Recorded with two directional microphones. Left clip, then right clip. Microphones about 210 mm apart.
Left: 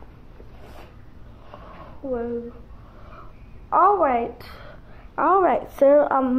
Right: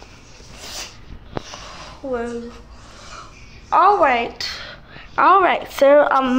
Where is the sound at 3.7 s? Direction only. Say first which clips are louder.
Right 4 dB; 15° right (ahead or behind).